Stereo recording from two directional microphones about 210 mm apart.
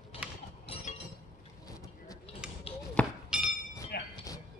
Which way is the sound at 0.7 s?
25° left (ahead or behind).